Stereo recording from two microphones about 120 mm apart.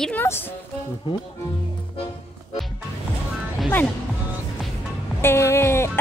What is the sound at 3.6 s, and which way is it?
Music, centre (ahead or behind).